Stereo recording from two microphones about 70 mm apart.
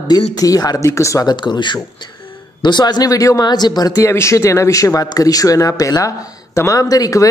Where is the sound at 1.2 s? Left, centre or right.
Left.